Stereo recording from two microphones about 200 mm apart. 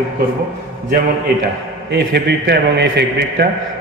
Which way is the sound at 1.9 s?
60° right (ahead or behind).